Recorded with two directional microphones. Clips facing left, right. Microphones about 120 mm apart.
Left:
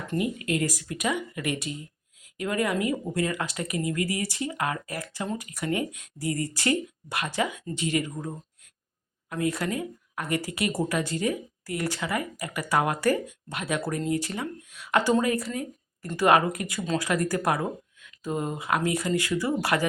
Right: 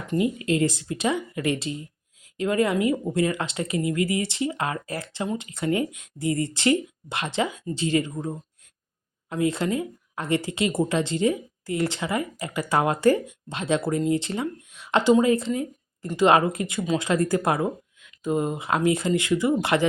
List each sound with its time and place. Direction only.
0.1 s a woman's voice: 25° right (ahead or behind)
9.3 s a woman's voice: 25° right (ahead or behind)